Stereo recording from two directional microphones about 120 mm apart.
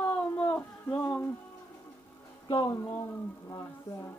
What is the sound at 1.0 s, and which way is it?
Music, 20° left (ahead or behind).